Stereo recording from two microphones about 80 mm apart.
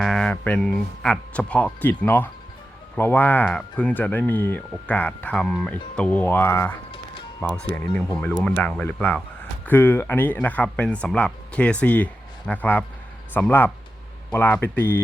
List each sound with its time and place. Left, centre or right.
0.0 s a sound: centre
0.3 s speech: left
0.6 s speech: centre; by 6.7 s left
7.4 s speech: centre
14.6 s speech: left